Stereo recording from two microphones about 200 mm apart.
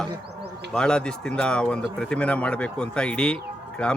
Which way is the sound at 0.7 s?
5° left (ahead or behind).